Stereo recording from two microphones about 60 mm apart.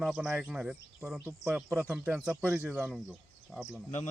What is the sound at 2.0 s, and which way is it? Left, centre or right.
Speech, right.